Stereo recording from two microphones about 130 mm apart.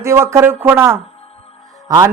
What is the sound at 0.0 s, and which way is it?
A man's voice, 20° right (ahead or behind).